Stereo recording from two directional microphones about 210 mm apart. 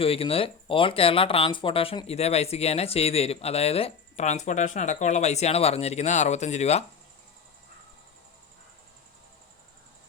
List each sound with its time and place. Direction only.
0.0 s speech: 25° left (ahead or behind)